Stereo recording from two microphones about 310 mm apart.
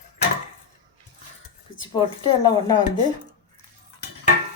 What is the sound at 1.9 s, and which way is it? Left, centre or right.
Speech, centre.